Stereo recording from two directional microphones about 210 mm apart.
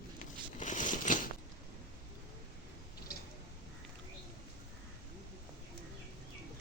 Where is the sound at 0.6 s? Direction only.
35° left (ahead or behind).